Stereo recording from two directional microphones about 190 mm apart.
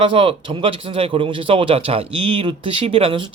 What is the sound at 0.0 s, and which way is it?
Speech, 25° right (ahead or behind).